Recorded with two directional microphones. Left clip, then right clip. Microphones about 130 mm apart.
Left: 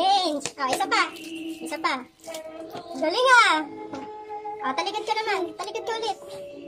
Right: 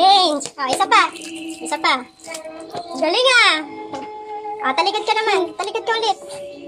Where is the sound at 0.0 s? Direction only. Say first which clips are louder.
Right 9 dB; 25° left (ahead or behind).